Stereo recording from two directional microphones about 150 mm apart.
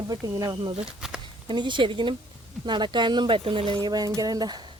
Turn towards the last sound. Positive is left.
turn(degrees=-25)  # may be behind; listen again after turning